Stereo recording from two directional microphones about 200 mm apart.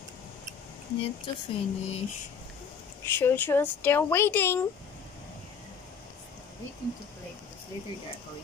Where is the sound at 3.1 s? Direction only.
10° left (ahead or behind).